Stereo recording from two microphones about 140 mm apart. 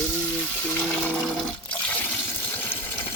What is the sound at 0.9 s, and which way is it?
Water, 10° left (ahead or behind).